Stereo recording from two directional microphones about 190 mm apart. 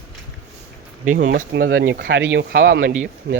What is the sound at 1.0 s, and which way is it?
Speech, 45° right (ahead or behind).